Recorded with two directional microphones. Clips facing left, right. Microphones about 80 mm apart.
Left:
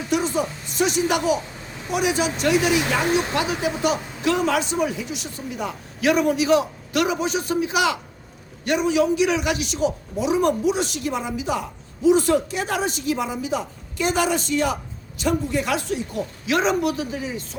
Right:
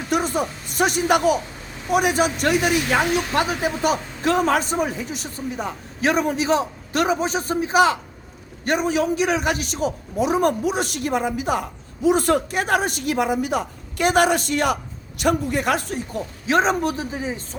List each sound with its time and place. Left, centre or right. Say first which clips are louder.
0.1 s a woman's voice: right 1 dB; right
3.3 s a man's voice: right 2 dB; right